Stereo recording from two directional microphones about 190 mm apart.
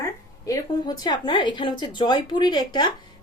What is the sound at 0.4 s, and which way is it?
Speech, 20° left (ahead or behind).